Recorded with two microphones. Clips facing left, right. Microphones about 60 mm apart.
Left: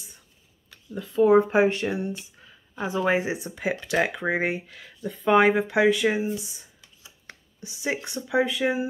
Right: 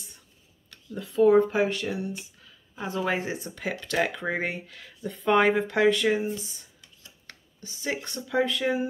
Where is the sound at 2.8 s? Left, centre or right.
Centre.